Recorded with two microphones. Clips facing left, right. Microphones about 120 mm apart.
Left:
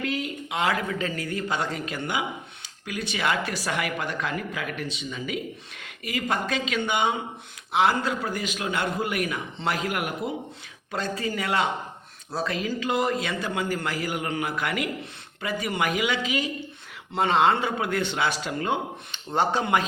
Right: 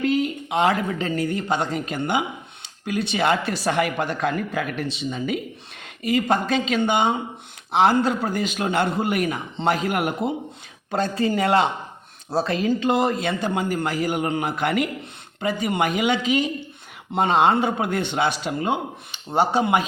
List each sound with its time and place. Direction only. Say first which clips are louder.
0.1 s a woman's voice: right 7 dB; 25° right (ahead or behind)
10.9 s speech: right 6 dB; 55° right (ahead or behind)
11.2 s speech: right 7 dB; 30° right (ahead or behind); by 19.8 s 15° right (ahead or behind)